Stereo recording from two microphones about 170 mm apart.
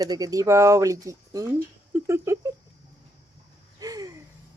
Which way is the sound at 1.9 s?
15° right (ahead or behind).